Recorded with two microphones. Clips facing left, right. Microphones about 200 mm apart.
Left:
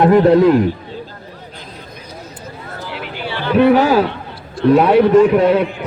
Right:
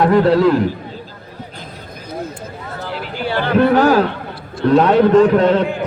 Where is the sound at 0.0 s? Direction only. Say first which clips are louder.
Left 2 dB; 20° left (ahead or behind).